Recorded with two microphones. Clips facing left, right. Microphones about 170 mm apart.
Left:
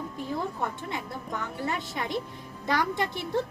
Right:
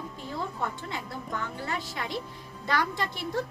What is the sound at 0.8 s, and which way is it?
A woman's voice, 20° left (ahead or behind).